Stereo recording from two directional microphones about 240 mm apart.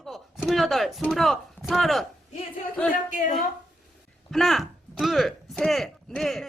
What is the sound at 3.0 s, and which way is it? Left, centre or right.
Speech, left.